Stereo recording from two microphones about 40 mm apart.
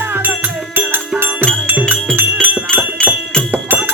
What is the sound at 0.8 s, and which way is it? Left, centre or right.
Music, right.